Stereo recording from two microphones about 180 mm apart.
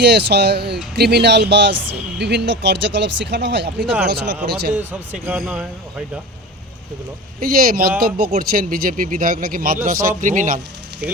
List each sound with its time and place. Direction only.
0.0 s speech: 65° right (ahead or behind)
3.8 s speech: 5° right (ahead or behind)
7.3 s speech: 50° right (ahead or behind)